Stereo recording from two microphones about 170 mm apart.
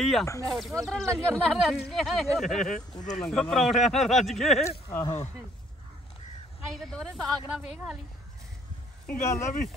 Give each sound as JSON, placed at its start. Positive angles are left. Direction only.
{"t": 0.0, "sound": "speech", "side_deg": 0}
{"t": 4.6, "sound": "speech", "side_deg": 20}
{"t": 6.7, "sound": "speech", "side_deg": 0}
{"t": 9.1, "sound": "speech", "side_deg": 60}